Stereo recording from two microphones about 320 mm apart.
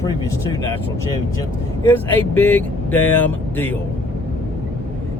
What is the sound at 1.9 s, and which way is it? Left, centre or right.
Speech, centre.